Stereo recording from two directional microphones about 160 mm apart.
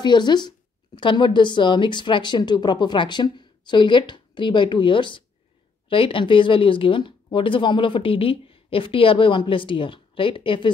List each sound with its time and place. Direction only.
0.0 s a woman's voice: 25° left (ahead or behind)